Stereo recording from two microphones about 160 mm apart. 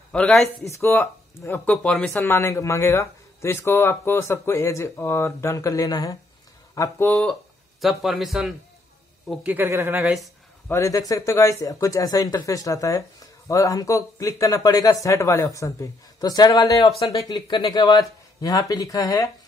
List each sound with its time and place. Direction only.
0.1 s a man's voice: 5° left (ahead or behind)
0.7 s speech: 15° left (ahead or behind)
7.1 s a man's voice: 5° left (ahead or behind); by 10.1 s 15° right (ahead or behind)
10.7 s speech: 20° left (ahead or behind)